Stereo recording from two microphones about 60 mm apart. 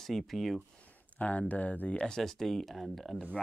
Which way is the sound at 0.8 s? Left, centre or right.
Left.